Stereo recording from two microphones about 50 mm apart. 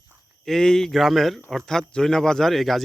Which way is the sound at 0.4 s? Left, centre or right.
Centre.